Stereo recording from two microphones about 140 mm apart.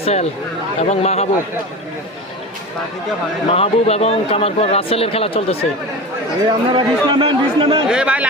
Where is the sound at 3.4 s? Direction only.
45° left (ahead or behind).